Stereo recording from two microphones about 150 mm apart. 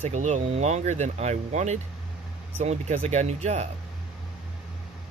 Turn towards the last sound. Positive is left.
turn(degrees=-50)  # may be behind; listen again after turning